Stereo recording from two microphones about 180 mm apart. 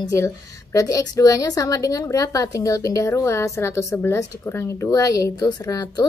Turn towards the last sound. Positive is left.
turn(degrees=20)  # may be behind; listen again after turning